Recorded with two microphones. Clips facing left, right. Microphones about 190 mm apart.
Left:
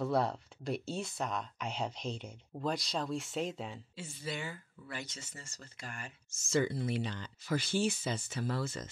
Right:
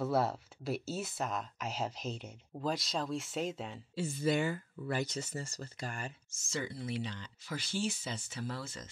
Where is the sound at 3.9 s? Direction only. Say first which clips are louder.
Right 11 dB; 45° right (ahead or behind).